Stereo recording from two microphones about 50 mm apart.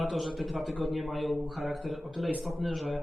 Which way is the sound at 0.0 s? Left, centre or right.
Centre.